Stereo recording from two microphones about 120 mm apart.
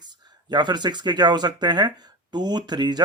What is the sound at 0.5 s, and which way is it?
Speech, 35° right (ahead or behind).